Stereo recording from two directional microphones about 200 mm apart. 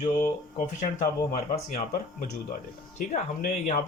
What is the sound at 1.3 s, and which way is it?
Speech, 35° left (ahead or behind).